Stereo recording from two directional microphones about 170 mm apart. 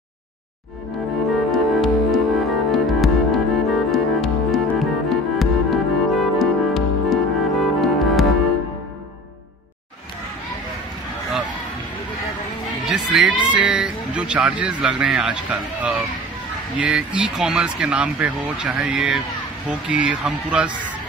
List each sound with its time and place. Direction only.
1.3 s music: centre (ahead or behind)
12.8 s speech: 5° right (ahead or behind)
16.8 s speech: 5° right (ahead or behind)